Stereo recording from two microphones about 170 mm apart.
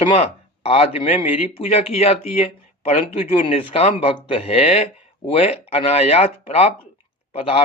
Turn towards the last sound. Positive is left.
turn(degrees=35)  # may be behind; listen again after turning